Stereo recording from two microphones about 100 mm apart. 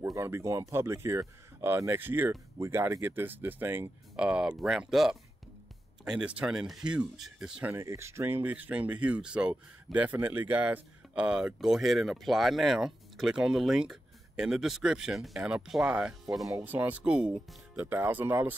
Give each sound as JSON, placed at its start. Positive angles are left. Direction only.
{"t": 0.0, "sound": "speech", "side_deg": -25}
{"t": 4.2, "sound": "speech", "side_deg": -10}
{"t": 7.7, "sound": "speech", "side_deg": -30}